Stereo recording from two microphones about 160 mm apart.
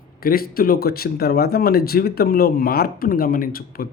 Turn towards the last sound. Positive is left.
turn(degrees=65)  # may be behind; listen again after turning